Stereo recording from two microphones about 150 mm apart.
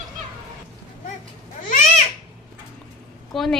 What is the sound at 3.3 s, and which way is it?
Speech, centre (ahead or behind).